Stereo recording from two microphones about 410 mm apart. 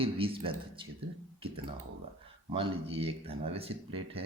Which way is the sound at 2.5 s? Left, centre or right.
Centre.